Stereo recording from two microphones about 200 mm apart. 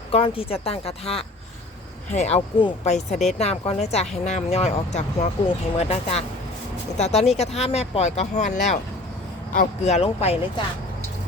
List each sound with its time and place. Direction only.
0.1 s speech: 30° left (ahead or behind)